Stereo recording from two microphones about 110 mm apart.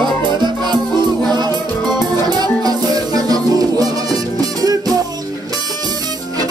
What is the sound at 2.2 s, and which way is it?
Music, 35° right (ahead or behind).